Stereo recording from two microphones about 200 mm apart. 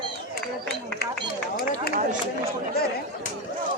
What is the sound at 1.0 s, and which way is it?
Speech, 50° left (ahead or behind).